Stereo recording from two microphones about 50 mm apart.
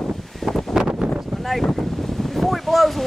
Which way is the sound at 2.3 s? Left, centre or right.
Centre.